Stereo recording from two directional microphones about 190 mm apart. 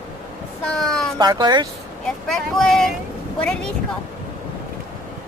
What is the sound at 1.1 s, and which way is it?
Speech, 20° right (ahead or behind).